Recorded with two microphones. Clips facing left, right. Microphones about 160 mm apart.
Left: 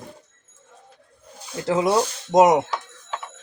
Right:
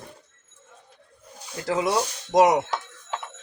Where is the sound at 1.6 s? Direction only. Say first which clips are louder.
Left 4 dB; 25° left (ahead or behind).